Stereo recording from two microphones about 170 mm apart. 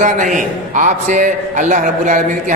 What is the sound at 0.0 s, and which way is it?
A man's voice, 50° right (ahead or behind).